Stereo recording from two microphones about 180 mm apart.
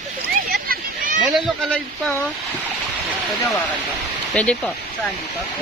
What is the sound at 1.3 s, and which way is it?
Speech, centre (ahead or behind).